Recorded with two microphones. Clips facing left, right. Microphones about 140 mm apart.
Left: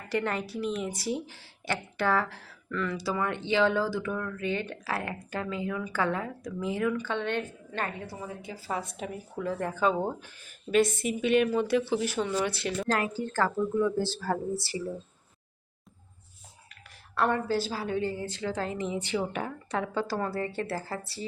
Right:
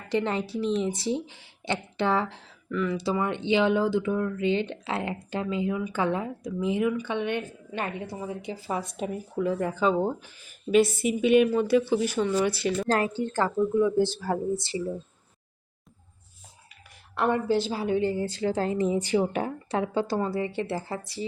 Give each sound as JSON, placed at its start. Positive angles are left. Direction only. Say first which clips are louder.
{"t": 0.1, "sound": "a woman's voice", "louder": "right 3 dB", "side_deg": -25}
{"t": 12.9, "sound": "a woman's voice", "louder": "right 3 dB", "side_deg": -30}
{"t": 13.3, "sound": "a woman's voice", "louder": "right 3 dB", "side_deg": -15}
{"t": 17.2, "sound": "a woman's voice", "louder": "right 3 dB", "side_deg": -15}
{"t": 20.1, "sound": "a woman's voice", "louder": "right 3 dB", "side_deg": -15}